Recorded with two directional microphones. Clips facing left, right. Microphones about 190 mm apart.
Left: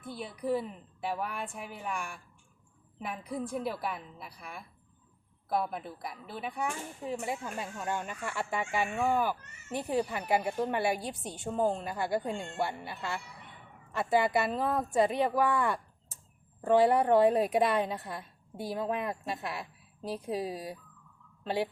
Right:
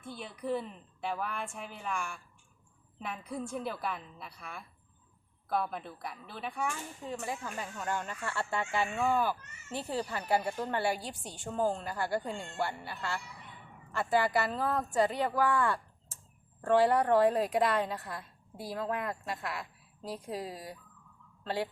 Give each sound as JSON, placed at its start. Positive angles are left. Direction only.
{"t": 0.2, "sound": "a woman's voice", "side_deg": 10}